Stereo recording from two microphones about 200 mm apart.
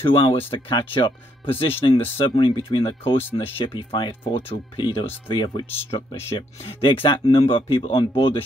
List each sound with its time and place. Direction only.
0.0 s speech: 25° left (ahead or behind)